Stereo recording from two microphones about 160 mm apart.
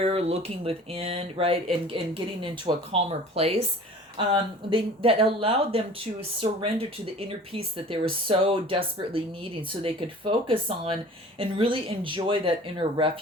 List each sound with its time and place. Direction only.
0.0 s speech: 40° right (ahead or behind)